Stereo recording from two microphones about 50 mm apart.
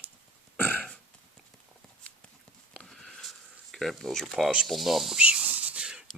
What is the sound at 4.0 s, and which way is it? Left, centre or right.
Speech, centre.